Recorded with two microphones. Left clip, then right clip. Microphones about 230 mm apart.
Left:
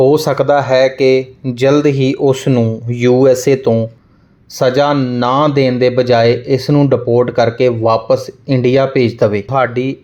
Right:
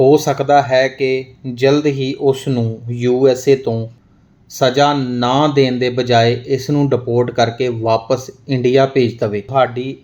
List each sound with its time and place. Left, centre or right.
0.0 s speech: centre